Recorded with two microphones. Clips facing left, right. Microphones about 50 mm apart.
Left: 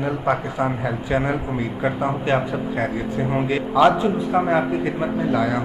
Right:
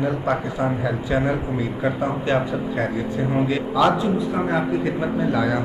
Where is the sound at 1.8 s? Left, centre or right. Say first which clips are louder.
Left 1 dB; centre.